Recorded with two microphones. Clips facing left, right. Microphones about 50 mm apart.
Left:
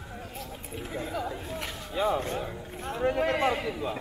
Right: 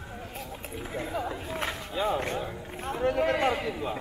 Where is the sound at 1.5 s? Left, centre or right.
Right.